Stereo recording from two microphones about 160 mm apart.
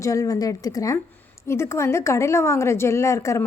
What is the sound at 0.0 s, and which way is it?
A woman's voice, 20° left (ahead or behind).